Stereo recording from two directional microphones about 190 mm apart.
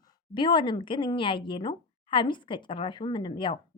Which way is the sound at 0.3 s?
25° left (ahead or behind).